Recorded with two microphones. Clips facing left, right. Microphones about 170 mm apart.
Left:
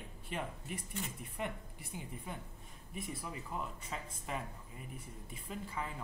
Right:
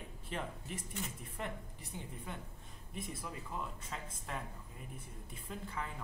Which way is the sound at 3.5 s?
5° left (ahead or behind).